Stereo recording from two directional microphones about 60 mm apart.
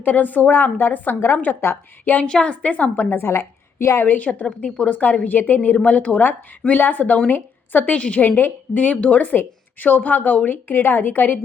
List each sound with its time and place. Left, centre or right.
0.0 s a woman's voice: left
2.2 s a woman's voice: centre; by 4.0 s left
4.0 s a woman's voice: left
7.9 s a woman's voice: centre
8.4 s a woman's voice: left